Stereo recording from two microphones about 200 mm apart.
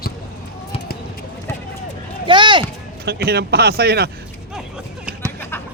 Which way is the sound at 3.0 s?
55° right (ahead or behind).